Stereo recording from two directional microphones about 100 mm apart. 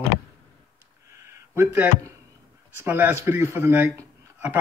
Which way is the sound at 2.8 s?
20° right (ahead or behind).